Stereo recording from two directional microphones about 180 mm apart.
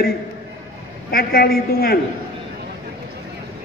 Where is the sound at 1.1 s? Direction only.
55° left (ahead or behind).